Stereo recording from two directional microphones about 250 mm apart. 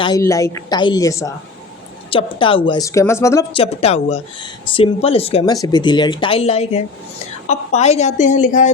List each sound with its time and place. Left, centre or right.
0.0 s a woman's voice: centre; by 8.7 s left